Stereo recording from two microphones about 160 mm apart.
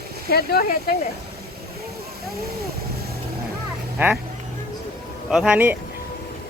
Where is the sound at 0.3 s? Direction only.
70° left (ahead or behind).